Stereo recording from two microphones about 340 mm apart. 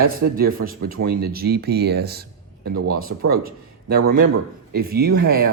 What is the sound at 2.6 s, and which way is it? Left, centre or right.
Speech, right.